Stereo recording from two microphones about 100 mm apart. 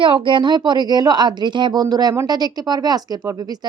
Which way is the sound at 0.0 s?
55° right (ahead or behind).